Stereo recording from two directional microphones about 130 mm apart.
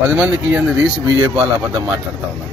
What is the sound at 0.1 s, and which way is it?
Speech, 10° right (ahead or behind).